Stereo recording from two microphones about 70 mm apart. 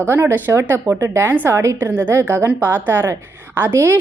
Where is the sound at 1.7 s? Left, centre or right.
Right.